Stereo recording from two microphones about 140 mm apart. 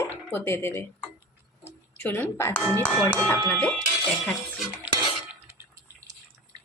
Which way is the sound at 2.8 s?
15° left (ahead or behind).